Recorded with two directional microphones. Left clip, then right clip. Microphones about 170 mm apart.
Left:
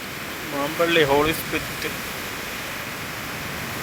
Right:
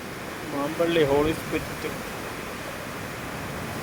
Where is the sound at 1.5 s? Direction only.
5° right (ahead or behind).